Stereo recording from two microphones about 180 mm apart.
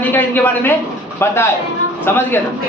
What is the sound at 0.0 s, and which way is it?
Speech, 10° left (ahead or behind).